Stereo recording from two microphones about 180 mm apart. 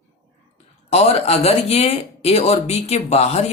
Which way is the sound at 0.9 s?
35° left (ahead or behind).